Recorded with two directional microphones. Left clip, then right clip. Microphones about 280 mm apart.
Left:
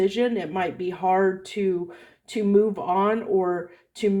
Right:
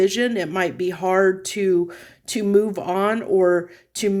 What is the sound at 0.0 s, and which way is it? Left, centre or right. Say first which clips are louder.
Speech: right 3 dB; right.